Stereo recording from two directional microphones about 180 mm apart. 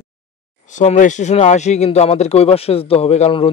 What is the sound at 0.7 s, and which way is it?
Speech, 45° left (ahead or behind).